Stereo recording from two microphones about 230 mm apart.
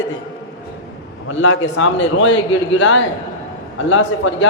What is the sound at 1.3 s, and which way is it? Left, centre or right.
A man's voice, left.